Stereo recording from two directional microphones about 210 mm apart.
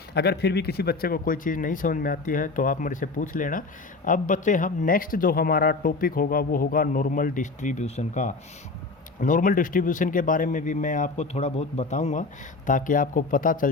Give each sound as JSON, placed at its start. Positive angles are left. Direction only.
{"t": 0.1, "sound": "speech", "side_deg": 50}